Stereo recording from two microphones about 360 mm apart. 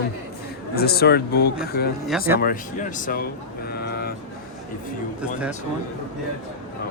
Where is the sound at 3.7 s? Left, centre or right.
Left.